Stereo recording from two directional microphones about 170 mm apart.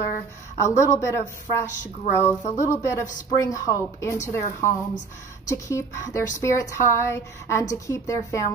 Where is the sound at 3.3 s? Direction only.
20° left (ahead or behind).